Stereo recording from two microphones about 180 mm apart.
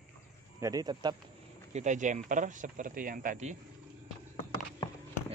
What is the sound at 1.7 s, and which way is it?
Speech, 40° right (ahead or behind).